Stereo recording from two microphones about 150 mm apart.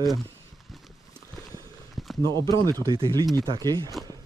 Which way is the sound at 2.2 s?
30° right (ahead or behind).